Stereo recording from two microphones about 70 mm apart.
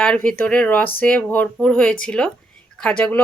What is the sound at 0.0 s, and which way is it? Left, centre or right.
Speech, centre.